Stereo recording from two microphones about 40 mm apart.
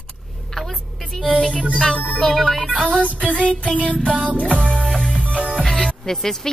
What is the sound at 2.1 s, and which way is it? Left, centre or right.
Speech, centre.